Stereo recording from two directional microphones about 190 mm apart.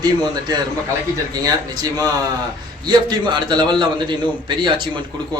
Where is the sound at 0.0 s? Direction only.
20° right (ahead or behind).